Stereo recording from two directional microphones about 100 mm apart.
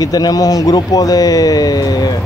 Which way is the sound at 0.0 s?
40° left (ahead or behind).